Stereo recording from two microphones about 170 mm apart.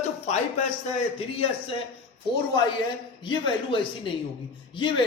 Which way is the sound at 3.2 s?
30° left (ahead or behind).